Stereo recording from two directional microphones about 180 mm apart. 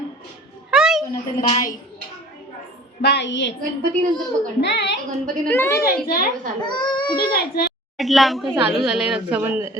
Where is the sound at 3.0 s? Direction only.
70° left (ahead or behind).